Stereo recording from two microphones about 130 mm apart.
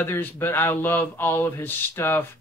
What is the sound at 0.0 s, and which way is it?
Speech, 15° left (ahead or behind).